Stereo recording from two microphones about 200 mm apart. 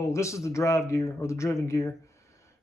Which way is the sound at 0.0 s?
15° left (ahead or behind).